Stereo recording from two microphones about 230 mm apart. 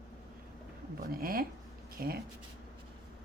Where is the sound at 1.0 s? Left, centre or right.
Right.